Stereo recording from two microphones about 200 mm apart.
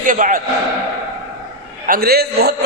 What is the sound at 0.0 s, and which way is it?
Speech, 40° right (ahead or behind).